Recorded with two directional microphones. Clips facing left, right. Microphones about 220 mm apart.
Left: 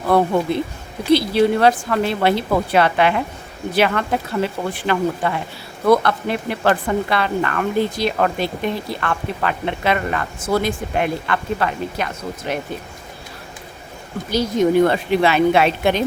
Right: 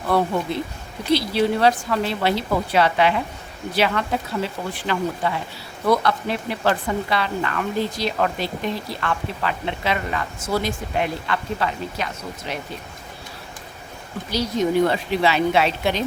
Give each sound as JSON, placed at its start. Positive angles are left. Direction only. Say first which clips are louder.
{"t": 0.1, "sound": "a woman's voice", "louder": "left 4 dB", "side_deg": 55}
{"t": 14.3, "sound": "a woman's voice", "louder": "left 5 dB", "side_deg": 50}